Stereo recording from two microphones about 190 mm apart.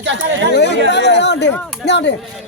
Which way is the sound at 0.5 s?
65° left (ahead or behind).